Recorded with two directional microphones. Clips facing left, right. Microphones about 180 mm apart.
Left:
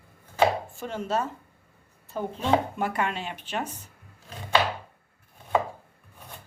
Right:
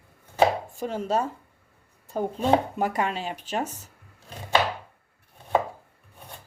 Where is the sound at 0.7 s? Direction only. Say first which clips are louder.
Right 3 dB; 40° right (ahead or behind).